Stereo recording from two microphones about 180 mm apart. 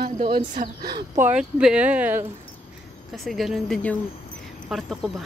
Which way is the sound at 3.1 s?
Centre (ahead or behind).